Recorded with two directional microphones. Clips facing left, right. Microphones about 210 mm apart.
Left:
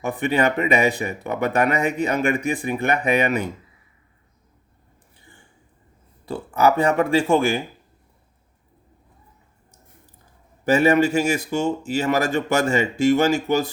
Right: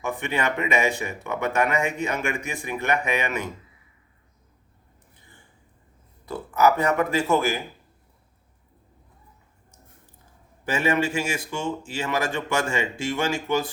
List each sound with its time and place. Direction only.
0.0 s speech: 35° left (ahead or behind)
6.2 s speech: 30° left (ahead or behind)
10.7 s speech: 40° left (ahead or behind)